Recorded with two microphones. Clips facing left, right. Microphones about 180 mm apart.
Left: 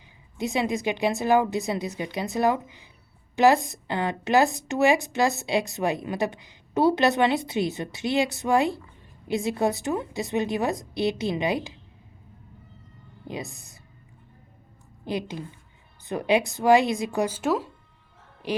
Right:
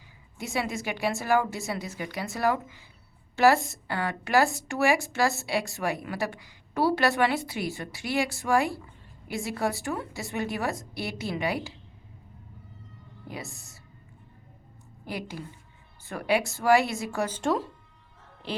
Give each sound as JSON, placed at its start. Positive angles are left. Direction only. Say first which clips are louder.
{"t": 0.3, "sound": "a woman's voice", "louder": "left 5 dB", "side_deg": 20}
{"t": 13.2, "sound": "a woman's voice", "louder": "left 5 dB", "side_deg": 20}
{"t": 15.0, "sound": "a woman's voice", "louder": "left 5 dB", "side_deg": 20}